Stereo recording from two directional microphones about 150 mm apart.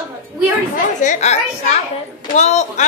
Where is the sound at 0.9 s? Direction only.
50° left (ahead or behind).